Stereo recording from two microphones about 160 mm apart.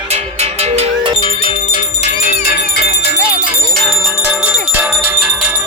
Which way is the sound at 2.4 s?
80° left.